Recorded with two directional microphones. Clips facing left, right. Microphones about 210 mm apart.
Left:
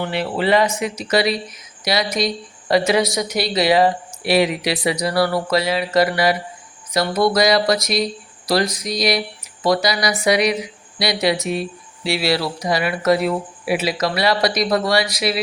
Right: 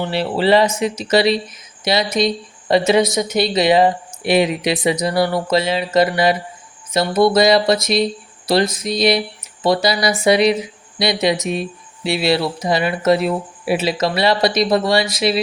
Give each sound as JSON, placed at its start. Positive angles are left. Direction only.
{"t": 0.0, "sound": "speech", "side_deg": -30}